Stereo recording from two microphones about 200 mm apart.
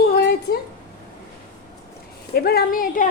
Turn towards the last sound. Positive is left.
turn(degrees=45)  # may be behind; listen again after turning